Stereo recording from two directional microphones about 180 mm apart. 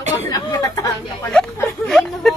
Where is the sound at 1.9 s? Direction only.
Centre (ahead or behind).